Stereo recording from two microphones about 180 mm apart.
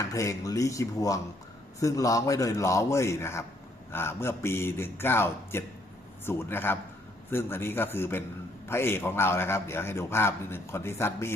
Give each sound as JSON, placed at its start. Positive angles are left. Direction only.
{"t": 0.0, "sound": "a man's voice", "side_deg": 15}